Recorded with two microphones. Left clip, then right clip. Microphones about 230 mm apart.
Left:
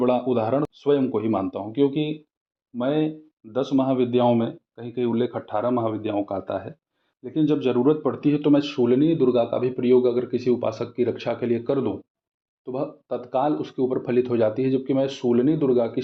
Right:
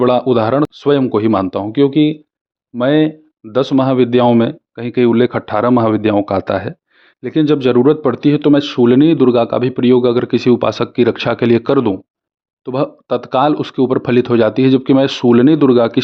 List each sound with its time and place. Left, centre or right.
0.0 s speech: right